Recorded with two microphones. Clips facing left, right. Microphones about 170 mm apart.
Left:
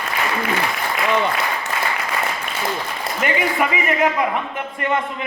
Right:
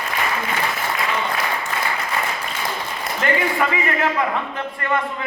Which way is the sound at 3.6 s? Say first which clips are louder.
Left 2 dB; 20° left (ahead or behind).